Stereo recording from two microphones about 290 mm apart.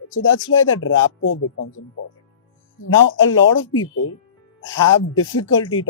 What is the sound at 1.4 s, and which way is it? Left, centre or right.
Speech, left.